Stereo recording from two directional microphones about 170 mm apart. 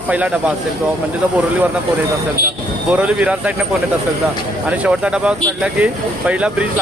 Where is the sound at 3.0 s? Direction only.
10° right (ahead or behind).